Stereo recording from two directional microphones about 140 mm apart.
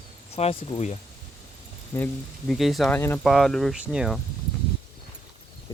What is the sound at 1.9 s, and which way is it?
Speech, 15° left (ahead or behind).